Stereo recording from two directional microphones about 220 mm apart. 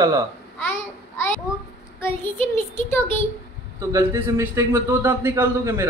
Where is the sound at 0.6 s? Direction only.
10° left (ahead or behind).